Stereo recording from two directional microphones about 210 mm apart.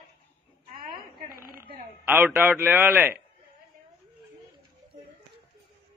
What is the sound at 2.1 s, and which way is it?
A man's voice, 10° right (ahead or behind).